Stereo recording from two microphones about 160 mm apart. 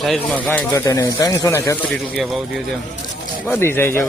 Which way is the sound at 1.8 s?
Centre (ahead or behind).